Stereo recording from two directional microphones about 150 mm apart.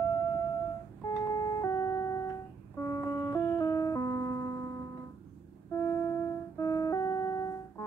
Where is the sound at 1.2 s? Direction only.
20° left (ahead or behind).